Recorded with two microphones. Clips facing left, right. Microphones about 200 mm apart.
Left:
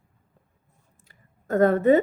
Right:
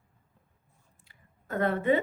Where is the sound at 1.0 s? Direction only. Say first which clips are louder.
Left 7 dB; 45° left (ahead or behind).